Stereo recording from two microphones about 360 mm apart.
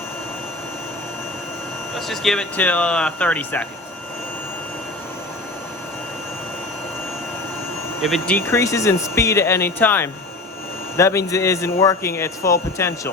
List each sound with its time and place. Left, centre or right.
2.0 s speech: centre
8.0 s speech: centre